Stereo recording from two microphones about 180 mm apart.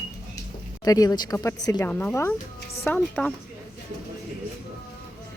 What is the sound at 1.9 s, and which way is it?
Speech, 10° left (ahead or behind).